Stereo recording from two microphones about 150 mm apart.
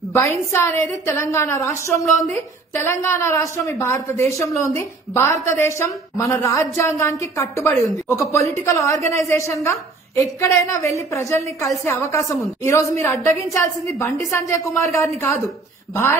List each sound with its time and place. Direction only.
0.1 s a woman's voice: 15° left (ahead or behind)